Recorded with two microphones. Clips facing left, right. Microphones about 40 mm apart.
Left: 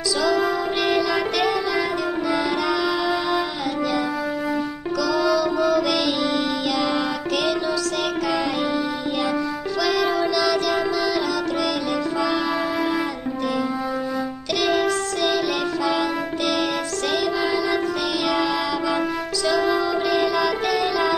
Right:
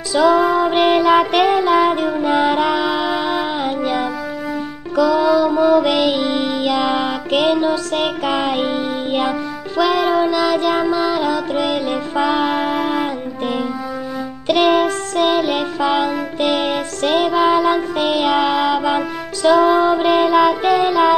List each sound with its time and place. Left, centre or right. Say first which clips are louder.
0.1 s music: right 8 dB; right
4.9 s music: right 7 dB; right
9.8 s music: right 6 dB; right
14.5 s music: right 7 dB; right